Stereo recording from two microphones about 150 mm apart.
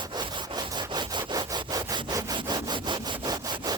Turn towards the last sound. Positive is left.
turn(degrees=-25)  # may be behind; listen again after turning